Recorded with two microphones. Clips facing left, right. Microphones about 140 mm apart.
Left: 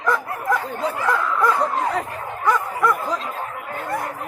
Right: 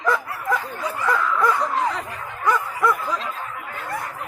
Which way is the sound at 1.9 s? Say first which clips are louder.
Left 5 dB; 55° left (ahead or behind).